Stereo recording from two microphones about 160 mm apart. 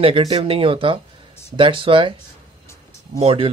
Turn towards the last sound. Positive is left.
turn(degrees=-35)  # may be behind; listen again after turning